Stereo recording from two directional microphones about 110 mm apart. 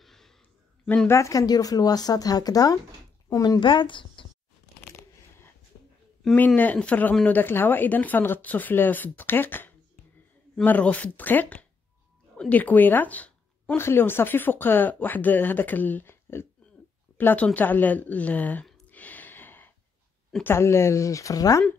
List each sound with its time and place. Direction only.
0.0 s a sound: 5° left (ahead or behind)
0.8 s speech: 15° left (ahead or behind)
1.1 s a woman's voice: 30° left (ahead or behind)
3.5 s a woman's voice: 50° left (ahead or behind)
6.3 s speech: 15° left (ahead or behind)
18.9 s gasp: 15° left (ahead or behind)
20.4 s speech: 25° left (ahead or behind)